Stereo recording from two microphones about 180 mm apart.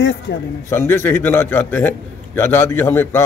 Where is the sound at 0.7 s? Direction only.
15° left (ahead or behind).